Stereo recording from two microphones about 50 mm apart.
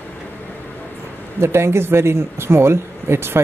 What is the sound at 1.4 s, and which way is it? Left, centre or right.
Speech, right.